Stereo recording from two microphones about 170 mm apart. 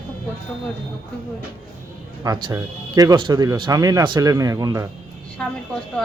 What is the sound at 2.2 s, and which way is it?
Speech, 25° right (ahead or behind).